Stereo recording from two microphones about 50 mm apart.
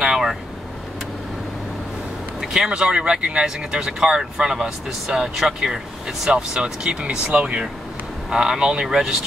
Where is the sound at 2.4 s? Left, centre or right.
Centre.